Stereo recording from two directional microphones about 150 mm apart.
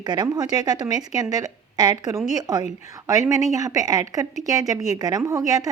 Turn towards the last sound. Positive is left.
turn(degrees=-25)  # may be behind; listen again after turning